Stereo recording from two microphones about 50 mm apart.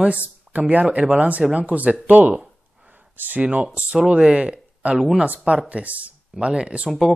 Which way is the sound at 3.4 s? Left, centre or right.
Right.